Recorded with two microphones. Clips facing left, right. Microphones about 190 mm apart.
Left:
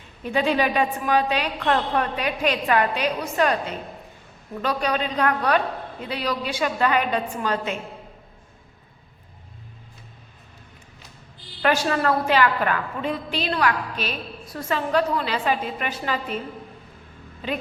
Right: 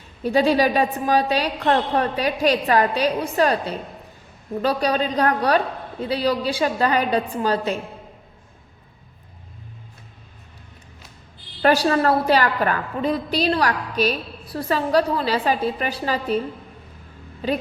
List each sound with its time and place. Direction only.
0.2 s a woman's voice: 35° right (ahead or behind)
11.6 s a woman's voice: 35° right (ahead or behind)